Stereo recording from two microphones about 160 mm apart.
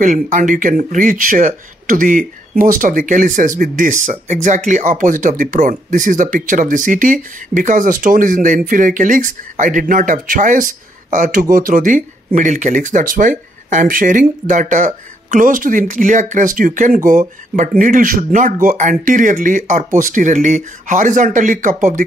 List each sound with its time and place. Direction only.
0.0 s speech: 50° right (ahead or behind)